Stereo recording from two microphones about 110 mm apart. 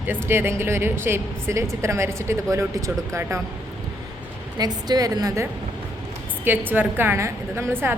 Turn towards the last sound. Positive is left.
turn(degrees=-20)  # may be behind; listen again after turning